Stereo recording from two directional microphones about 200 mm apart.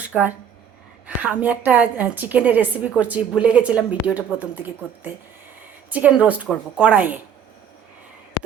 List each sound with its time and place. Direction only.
0.1 s a woman's voice: 10° right (ahead or behind)